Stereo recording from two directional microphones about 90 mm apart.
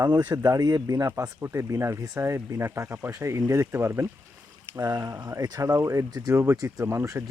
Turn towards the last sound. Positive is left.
turn(degrees=-30)  # may be behind; listen again after turning